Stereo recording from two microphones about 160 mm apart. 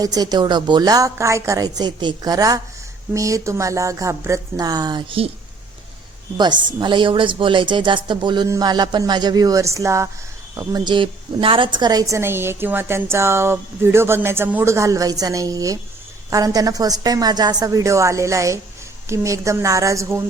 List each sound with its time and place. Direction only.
0.0 s a woman's voice: 25° right (ahead or behind)
6.3 s a woman's voice: 30° right (ahead or behind)